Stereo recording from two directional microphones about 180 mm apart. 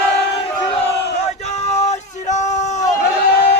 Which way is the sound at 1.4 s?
40° left (ahead or behind).